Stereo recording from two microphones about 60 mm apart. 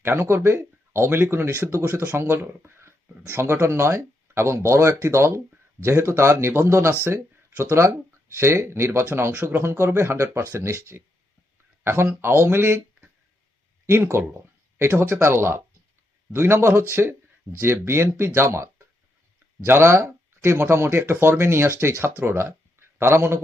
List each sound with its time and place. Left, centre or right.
0.0 s speech: right
13.8 s speech: right